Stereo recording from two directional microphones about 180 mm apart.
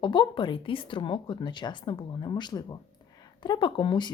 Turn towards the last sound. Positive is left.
turn(degrees=25)  # may be behind; listen again after turning